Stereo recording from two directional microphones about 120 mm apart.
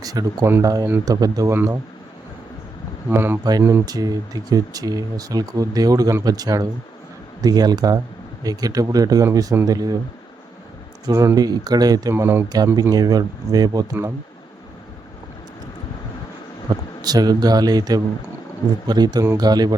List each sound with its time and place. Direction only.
0.0 s speech: 30° right (ahead or behind)
3.1 s speech: 20° right (ahead or behind)
3.8 s speech: 30° right (ahead or behind)
11.0 s speech: 25° right (ahead or behind)
12.1 s speech: 20° right (ahead or behind)
12.5 s speech: 35° right (ahead or behind)
16.6 s speech: 35° right (ahead or behind)